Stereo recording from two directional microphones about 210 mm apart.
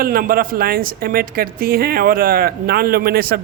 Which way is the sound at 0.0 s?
45° right (ahead or behind).